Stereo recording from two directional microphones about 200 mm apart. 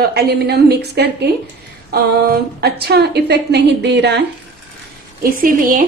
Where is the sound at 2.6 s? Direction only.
55° right (ahead or behind).